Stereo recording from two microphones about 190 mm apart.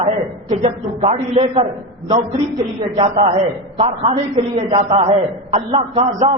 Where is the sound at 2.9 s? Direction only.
35° right (ahead or behind).